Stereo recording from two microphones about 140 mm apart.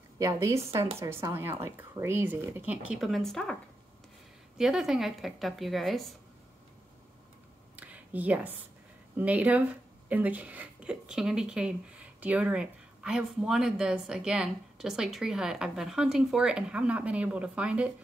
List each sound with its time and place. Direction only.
0.2 s speech: 20° right (ahead or behind); by 3.5 s 5° left (ahead or behind)
4.6 s a woman's voice: 5° right (ahead or behind)
7.7 s a sound: 10° right (ahead or behind)
9.1 s a woman's voice: 10° right (ahead or behind)